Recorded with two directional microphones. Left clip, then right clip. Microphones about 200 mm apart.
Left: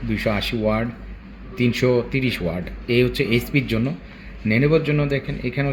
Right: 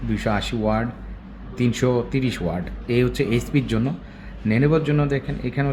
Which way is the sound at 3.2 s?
35° right (ahead or behind).